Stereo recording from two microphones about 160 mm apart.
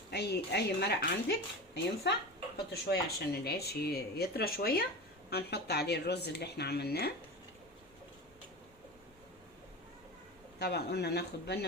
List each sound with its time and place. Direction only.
0.1 s speech: 90° left; by 4.9 s 75° left (ahead or behind)
5.3 s speech: 90° left
10.6 s speech: 90° left